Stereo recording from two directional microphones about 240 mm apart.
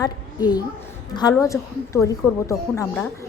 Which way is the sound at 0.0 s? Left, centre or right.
Centre.